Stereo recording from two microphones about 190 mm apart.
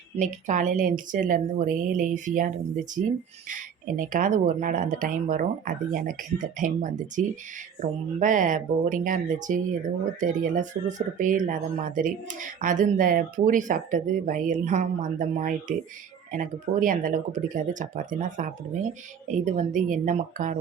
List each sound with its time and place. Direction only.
0.2 s a woman's voice: 40° right (ahead or behind)